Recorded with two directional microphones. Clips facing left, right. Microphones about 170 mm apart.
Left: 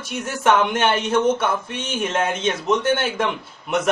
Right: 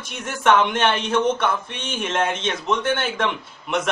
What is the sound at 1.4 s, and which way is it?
Speech, 45° left (ahead or behind).